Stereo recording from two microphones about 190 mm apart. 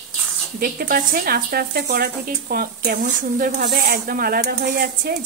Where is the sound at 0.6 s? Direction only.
50° right (ahead or behind).